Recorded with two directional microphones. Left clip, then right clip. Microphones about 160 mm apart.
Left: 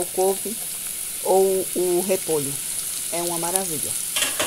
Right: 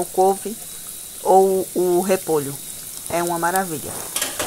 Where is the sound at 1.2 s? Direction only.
20° right (ahead or behind).